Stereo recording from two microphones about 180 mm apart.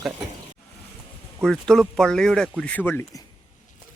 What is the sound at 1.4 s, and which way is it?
Speech, centre (ahead or behind).